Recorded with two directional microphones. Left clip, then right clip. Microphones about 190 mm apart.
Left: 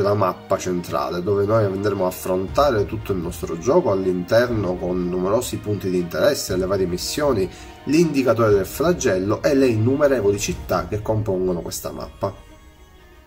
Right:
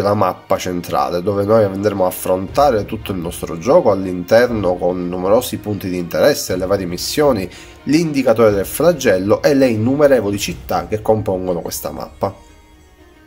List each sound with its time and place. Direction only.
0.0 s speech: 50° right (ahead or behind)